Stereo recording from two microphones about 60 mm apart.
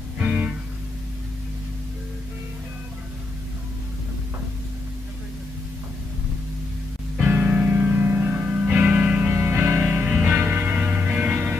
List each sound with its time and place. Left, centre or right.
0.2 s music: right
7.2 s music: right
9.3 s music: right